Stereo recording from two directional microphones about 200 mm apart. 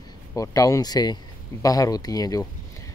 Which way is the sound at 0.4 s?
15° left (ahead or behind).